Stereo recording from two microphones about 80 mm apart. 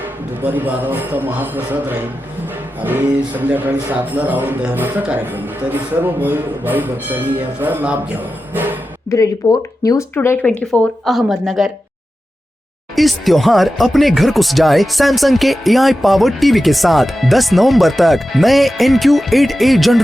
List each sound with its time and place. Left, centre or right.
0.0 s a man's voice: right
9.0 s speech: left
10.4 s speech: left
11.0 s speech: centre
13.0 s speech: centre